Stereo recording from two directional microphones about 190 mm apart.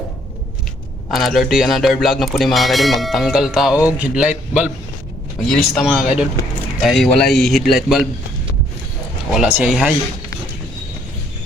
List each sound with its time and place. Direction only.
1.1 s speech: centre (ahead or behind)
9.3 s speech: 5° right (ahead or behind)